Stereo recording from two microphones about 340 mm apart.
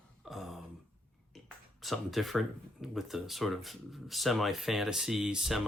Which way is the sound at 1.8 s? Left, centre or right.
Centre.